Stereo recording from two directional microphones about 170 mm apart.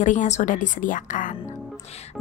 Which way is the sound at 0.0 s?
45° left (ahead or behind).